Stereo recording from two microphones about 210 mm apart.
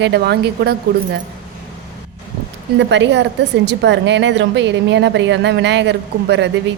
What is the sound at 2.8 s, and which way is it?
A woman's voice, 60° right (ahead or behind).